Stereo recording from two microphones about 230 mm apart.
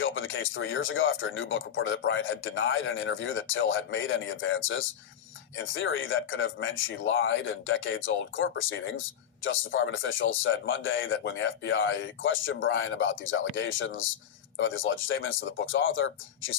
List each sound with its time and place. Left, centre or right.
0.0 s speech: left